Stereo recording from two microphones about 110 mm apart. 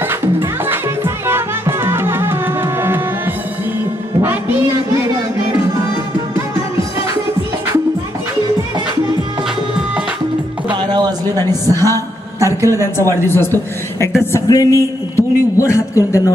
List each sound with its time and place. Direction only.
0.0 s music: 20° right (ahead or behind)
10.7 s a sound: 45° right (ahead or behind); by 12.9 s 25° right (ahead or behind)
12.9 s a man's voice: 20° left (ahead or behind)